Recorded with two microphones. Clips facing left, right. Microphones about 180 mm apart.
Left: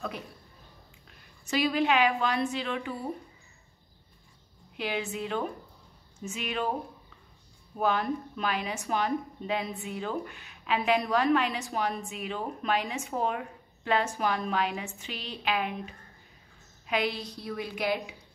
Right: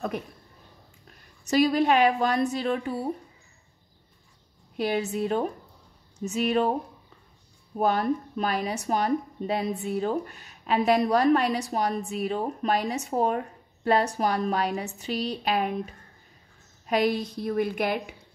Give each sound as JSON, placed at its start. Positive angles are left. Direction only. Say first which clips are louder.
{"t": 1.4, "sound": "a woman's voice", "louder": "right 5 dB", "side_deg": -40}
{"t": 4.7, "sound": "a woman's voice", "louder": "right 6 dB", "side_deg": -40}
{"t": 7.8, "sound": "a woman's voice", "louder": "right 4 dB", "side_deg": -40}